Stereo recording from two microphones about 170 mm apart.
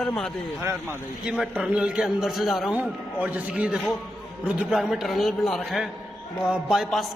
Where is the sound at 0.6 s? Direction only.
15° right (ahead or behind).